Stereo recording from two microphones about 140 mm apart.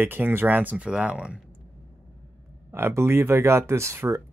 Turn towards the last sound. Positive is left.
turn(degrees=-20)  # may be behind; listen again after turning